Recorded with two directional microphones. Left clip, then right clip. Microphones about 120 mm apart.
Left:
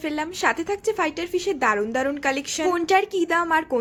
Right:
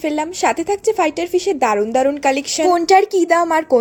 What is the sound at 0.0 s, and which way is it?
A woman's voice, 30° right (ahead or behind).